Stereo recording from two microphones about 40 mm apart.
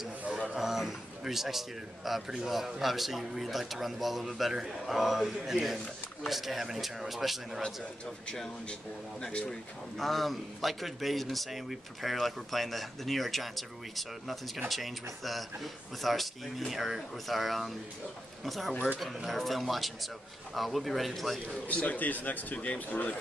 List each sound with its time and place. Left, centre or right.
0.6 s a man's voice: centre
9.9 s a man's voice: centre
21.6 s a man's voice: left